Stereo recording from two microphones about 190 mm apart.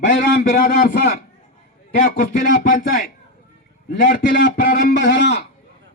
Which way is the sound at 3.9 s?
60° left (ahead or behind).